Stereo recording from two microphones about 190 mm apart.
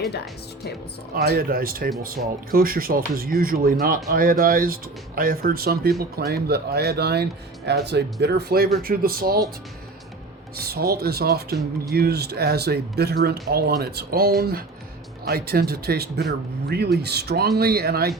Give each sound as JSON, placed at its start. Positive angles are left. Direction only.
{"t": 1.1, "sound": "speech", "side_deg": -55}
{"t": 10.6, "sound": "speech", "side_deg": -55}